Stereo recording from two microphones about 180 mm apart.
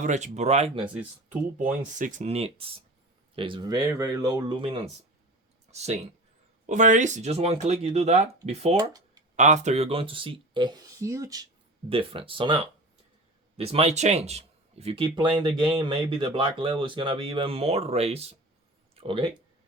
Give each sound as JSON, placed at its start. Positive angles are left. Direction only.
{"t": 0.0, "sound": "speech", "side_deg": -40}
{"t": 8.7, "sound": "speech", "side_deg": -20}
{"t": 9.3, "sound": "speech", "side_deg": -40}
{"t": 11.9, "sound": "speech", "side_deg": -30}
{"t": 13.6, "sound": "speech", "side_deg": -35}